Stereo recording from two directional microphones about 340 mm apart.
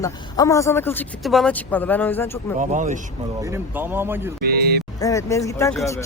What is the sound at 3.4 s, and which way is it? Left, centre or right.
Speech, centre.